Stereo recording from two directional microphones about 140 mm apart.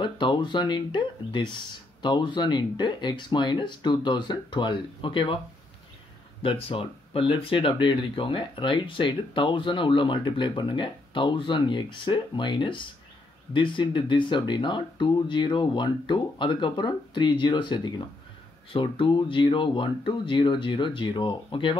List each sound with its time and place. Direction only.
0.0 s speech: 35° left (ahead or behind)
6.4 s speech: 35° left (ahead or behind)